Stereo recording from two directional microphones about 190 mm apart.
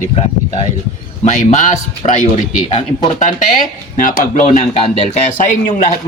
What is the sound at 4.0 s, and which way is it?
Speech, 40° left (ahead or behind).